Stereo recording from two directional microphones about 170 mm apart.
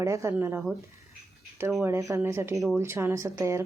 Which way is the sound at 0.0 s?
20° right (ahead or behind).